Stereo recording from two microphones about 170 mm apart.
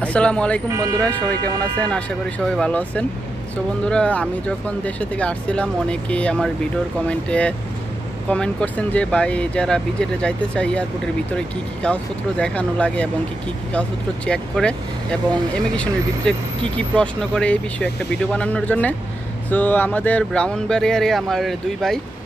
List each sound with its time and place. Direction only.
0.0 s speech: 5° left (ahead or behind)
0.7 s speech: 20° right (ahead or behind)
1.9 s speech: 5° left (ahead or behind)